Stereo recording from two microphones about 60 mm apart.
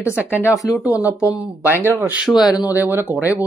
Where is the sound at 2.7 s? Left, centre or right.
Right.